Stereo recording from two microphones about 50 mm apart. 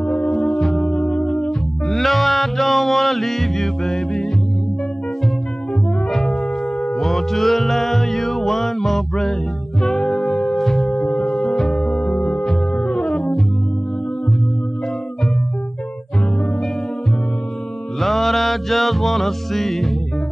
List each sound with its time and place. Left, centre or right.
0.0 s music: left
0.3 s music: centre
0.8 s music: centre
1.9 s music: centre
6.0 s music: centre
11.0 s music: centre
11.2 s music: centre
11.8 s music: centre
18.0 s music: centre